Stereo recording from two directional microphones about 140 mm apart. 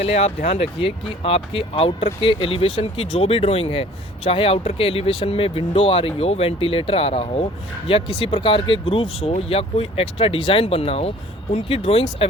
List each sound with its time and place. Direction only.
0.0 s speech: 50° left (ahead or behind)